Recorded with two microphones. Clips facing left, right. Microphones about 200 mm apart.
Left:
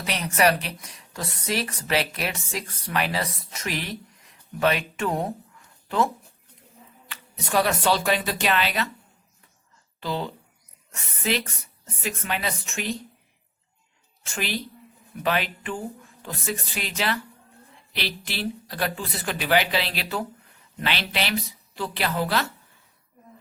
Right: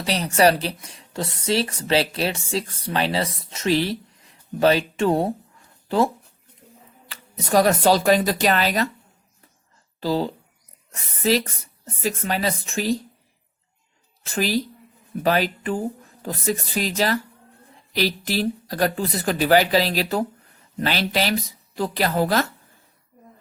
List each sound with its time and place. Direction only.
0.0 s speech: 30° right (ahead or behind)
7.1 s speech: 40° right (ahead or behind)
10.0 s speech: 35° right (ahead or behind)
14.3 s speech: 40° right (ahead or behind)